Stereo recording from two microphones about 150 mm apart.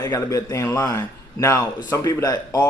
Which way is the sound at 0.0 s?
25° left (ahead or behind).